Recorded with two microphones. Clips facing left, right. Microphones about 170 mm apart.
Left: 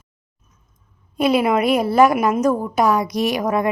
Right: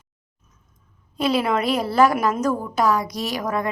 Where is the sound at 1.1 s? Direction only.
15° left (ahead or behind).